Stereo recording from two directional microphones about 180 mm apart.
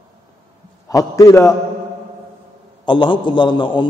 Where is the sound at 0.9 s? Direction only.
20° left (ahead or behind).